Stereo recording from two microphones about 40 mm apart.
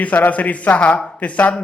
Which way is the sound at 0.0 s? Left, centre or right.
Left.